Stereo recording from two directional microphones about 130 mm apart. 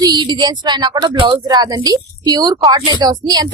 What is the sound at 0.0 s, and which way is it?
Speech, 35° right (ahead or behind).